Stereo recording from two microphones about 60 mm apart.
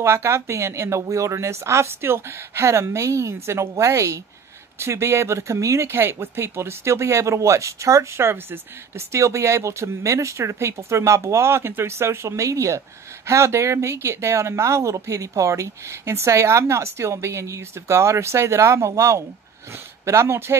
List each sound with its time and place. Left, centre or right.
0.0 s speech: right